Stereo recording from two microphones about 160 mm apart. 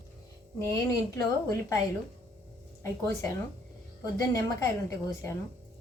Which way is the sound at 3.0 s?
20° left (ahead or behind).